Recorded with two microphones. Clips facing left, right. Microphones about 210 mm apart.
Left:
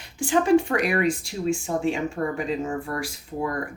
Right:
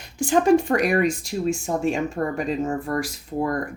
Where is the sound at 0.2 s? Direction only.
40° right (ahead or behind).